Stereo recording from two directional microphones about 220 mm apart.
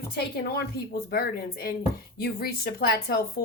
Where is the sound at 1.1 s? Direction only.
45° left (ahead or behind).